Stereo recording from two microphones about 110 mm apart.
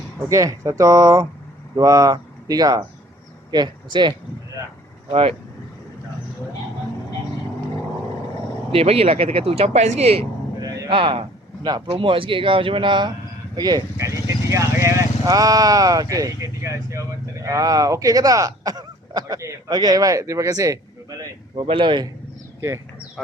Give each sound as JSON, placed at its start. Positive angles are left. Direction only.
{"t": 0.3, "sound": "speech", "side_deg": -30}
{"t": 8.7, "sound": "speech", "side_deg": -65}
{"t": 10.6, "sound": "a sound", "side_deg": -35}
{"t": 10.9, "sound": "speech", "side_deg": -55}
{"t": 13.9, "sound": "speech", "side_deg": -25}
{"t": 21.5, "sound": "speech", "side_deg": -50}